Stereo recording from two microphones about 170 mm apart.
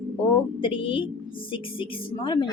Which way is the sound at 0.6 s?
30° left (ahead or behind).